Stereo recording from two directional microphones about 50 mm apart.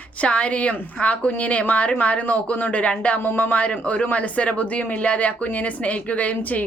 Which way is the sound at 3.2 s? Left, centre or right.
Left.